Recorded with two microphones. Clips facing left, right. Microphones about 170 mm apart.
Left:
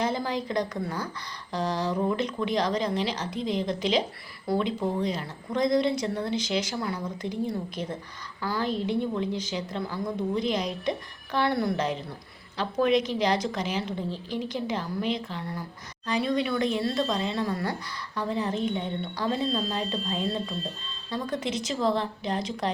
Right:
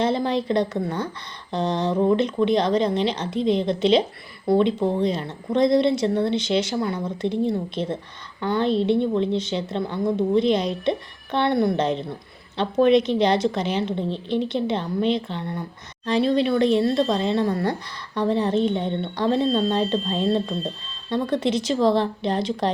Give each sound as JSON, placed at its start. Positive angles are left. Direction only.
{"t": 0.0, "sound": "speech", "side_deg": -25}
{"t": 21.4, "sound": "a woman's voice", "side_deg": -30}